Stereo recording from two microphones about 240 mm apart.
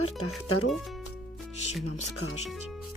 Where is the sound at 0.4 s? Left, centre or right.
Left.